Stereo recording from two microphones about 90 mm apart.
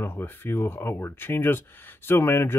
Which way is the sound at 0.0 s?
25° left (ahead or behind).